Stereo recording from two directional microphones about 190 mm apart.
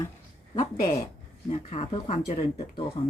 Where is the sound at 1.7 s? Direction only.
30° left (ahead or behind).